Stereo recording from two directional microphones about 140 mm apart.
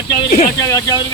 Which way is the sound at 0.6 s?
25° left (ahead or behind).